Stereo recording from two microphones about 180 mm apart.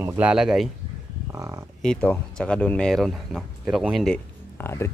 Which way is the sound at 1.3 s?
15° right (ahead or behind).